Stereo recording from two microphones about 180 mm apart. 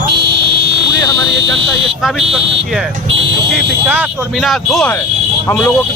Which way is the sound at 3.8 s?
10° right (ahead or behind).